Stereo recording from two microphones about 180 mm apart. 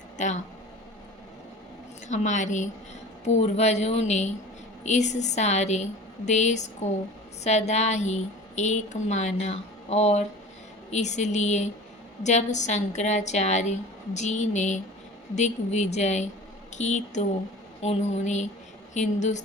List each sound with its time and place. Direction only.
0.2 s a woman's voice: 40° left (ahead or behind)
2.0 s a woman's voice: 40° left (ahead or behind)